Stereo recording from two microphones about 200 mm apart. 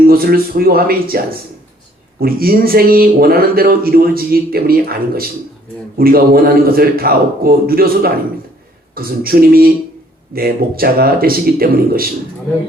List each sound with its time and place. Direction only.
0.0 s speech: 50° right (ahead or behind)